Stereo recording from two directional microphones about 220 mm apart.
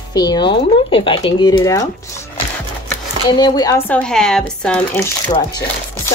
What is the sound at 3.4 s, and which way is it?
Speech, 20° left (ahead or behind).